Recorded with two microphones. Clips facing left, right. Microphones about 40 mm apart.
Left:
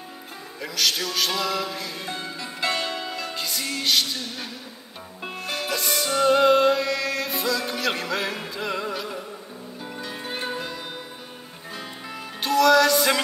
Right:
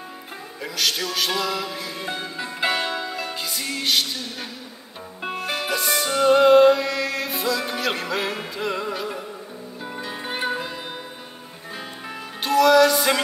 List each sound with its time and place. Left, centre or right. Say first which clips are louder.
0.6 s music: even; centre
2.0 s music: right 3 dB; centre
3.3 s music: right 1 dB; centre
9.9 s music: right 3 dB; centre
12.4 s music: right 2 dB; centre